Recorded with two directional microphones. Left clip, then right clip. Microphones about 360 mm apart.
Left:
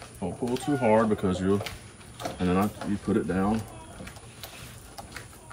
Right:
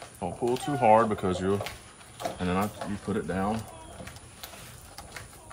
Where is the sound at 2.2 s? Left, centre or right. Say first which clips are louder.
Right 1 dB; right.